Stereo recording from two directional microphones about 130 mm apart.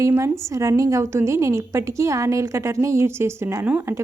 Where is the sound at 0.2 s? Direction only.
25° right (ahead or behind).